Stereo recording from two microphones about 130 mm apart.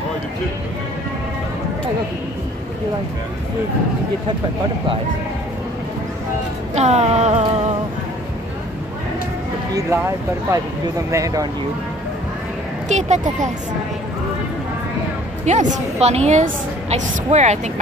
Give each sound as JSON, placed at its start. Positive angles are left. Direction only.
{"t": 6.7, "sound": "a woman's voice", "side_deg": -60}
{"t": 9.8, "sound": "speech", "side_deg": -25}
{"t": 12.8, "sound": "a woman's voice", "side_deg": -65}
{"t": 15.4, "sound": "a woman's voice", "side_deg": -70}